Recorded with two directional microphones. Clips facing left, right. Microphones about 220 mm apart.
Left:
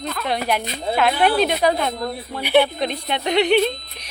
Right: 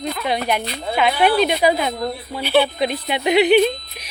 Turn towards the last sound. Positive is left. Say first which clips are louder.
# right 3 dB
turn(degrees=-5)  # may be behind; listen again after turning